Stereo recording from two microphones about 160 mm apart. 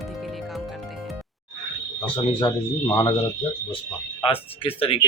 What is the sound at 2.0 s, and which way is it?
Speech, 30° left (ahead or behind).